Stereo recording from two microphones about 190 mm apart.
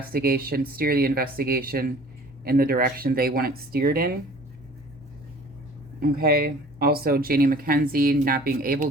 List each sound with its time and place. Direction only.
0.1 s speech: 50° right (ahead or behind)
6.0 s speech: 50° right (ahead or behind)